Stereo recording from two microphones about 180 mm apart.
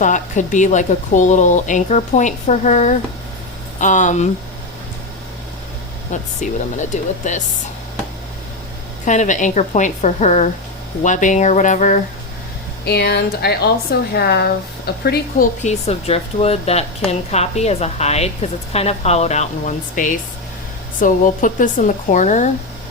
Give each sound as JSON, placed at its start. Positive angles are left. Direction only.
{"t": 0.0, "sound": "speech", "side_deg": 45}
{"t": 6.4, "sound": "speech", "side_deg": 40}
{"t": 9.0, "sound": "a woman's voice", "side_deg": 40}
{"t": 12.8, "sound": "speech", "side_deg": 65}
{"t": 15.6, "sound": "a woman's voice", "side_deg": 35}